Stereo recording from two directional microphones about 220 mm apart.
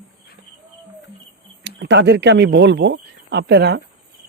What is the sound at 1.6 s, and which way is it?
A man's voice, 50° right (ahead or behind).